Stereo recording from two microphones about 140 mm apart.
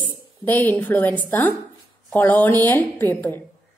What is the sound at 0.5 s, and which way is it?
Speech, 10° left (ahead or behind).